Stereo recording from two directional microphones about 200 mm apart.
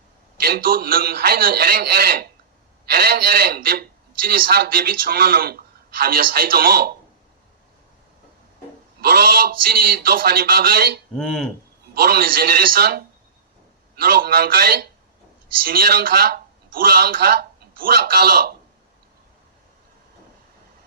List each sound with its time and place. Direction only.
0.3 s a man's voice: 50° right (ahead or behind)
9.0 s a man's voice: 50° right (ahead or behind)
11.1 s speech: 5° left (ahead or behind)
11.9 s a man's voice: 50° right (ahead or behind)